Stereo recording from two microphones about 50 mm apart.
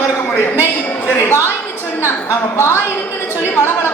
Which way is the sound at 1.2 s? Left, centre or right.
Left.